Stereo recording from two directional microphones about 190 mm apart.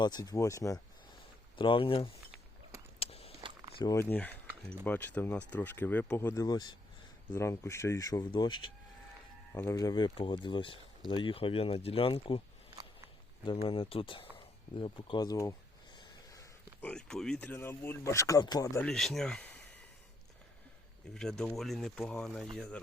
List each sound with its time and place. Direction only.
0.0 s speech: 20° left (ahead or behind)
3.0 s a sound: 30° left (ahead or behind)
3.8 s speech: 20° left (ahead or behind)
4.1 s speech: 10° left (ahead or behind); by 8.5 s 25° left (ahead or behind)
9.5 s speech: 15° left (ahead or behind); by 12.4 s 30° left (ahead or behind)
13.4 s speech: 30° left (ahead or behind)
14.3 s a sound: 30° left (ahead or behind)
16.8 s speech: 5° left (ahead or behind)
18.9 s speech: centre (ahead or behind)
21.1 s speech: centre (ahead or behind)